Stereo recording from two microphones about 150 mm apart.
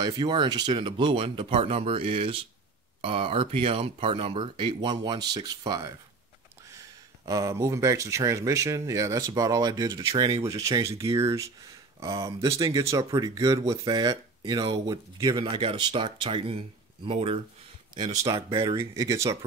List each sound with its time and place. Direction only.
0.0 s speech: 30° right (ahead or behind)
17.9 s speech: 25° right (ahead or behind)